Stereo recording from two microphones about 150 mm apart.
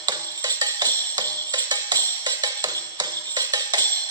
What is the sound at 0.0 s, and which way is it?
Music, 25° right (ahead or behind).